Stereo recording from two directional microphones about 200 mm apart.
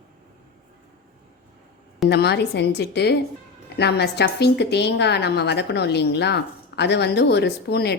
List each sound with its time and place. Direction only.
2.0 s a woman's voice: 55° left (ahead or behind)